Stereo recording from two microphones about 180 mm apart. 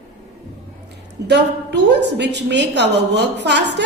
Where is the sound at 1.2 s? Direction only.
70° right (ahead or behind).